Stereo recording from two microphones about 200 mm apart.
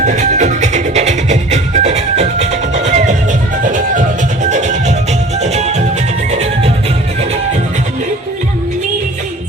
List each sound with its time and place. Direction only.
0.0 s music: 35° right (ahead or behind)